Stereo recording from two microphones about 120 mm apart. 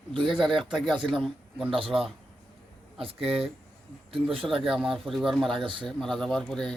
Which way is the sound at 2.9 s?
50° right (ahead or behind).